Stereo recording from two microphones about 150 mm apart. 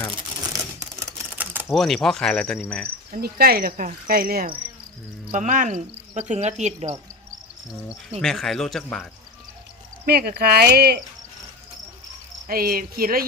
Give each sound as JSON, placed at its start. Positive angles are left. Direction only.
{"t": 0.5, "sound": "typewriter", "side_deg": -25}
{"t": 1.7, "sound": "speech", "side_deg": 0}
{"t": 2.6, "sound": "cricket", "side_deg": 5}
{"t": 3.1, "sound": "cricket", "side_deg": -90}
{"t": 5.3, "sound": "cricket", "side_deg": -60}
{"t": 8.2, "sound": "speech", "side_deg": 0}
{"t": 10.1, "sound": "speech", "side_deg": -90}
{"t": 12.5, "sound": "speech", "side_deg": -75}